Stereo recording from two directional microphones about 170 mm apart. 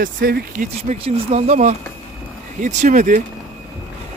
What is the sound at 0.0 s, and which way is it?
Speech, 55° right (ahead or behind).